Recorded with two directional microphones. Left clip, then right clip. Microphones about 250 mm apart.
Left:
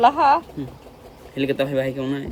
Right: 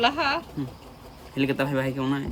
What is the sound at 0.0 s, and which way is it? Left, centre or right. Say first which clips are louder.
Speech: left 8 dB; centre.